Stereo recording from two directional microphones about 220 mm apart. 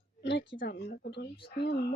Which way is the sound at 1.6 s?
50° left (ahead or behind).